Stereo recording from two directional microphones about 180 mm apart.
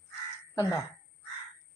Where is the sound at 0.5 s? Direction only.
20° left (ahead or behind).